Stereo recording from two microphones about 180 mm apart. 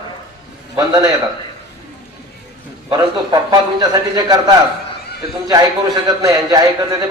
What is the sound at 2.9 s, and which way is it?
A man's voice, 20° right (ahead or behind).